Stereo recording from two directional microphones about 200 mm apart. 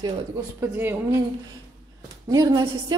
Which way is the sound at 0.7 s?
10° right (ahead or behind).